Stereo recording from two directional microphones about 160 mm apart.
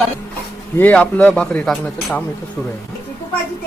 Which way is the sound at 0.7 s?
10° left (ahead or behind).